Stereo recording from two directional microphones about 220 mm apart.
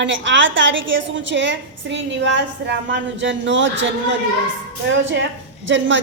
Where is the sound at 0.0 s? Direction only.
55° right (ahead or behind).